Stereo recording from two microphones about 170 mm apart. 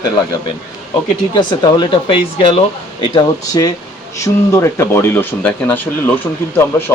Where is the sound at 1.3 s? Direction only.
25° left (ahead or behind).